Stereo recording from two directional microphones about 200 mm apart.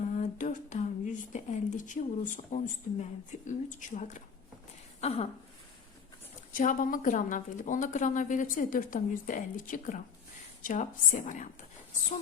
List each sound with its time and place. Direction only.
0.1 s speech: 40° left (ahead or behind)
4.9 s a sound: 30° left (ahead or behind)
6.5 s speech: 45° left (ahead or behind)